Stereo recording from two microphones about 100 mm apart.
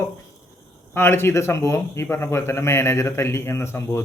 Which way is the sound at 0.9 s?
25° left (ahead or behind).